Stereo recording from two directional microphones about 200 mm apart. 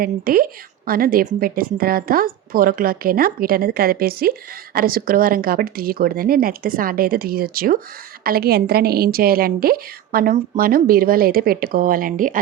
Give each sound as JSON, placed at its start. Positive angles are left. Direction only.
{"t": 0.0, "sound": "a woman's voice", "side_deg": -45}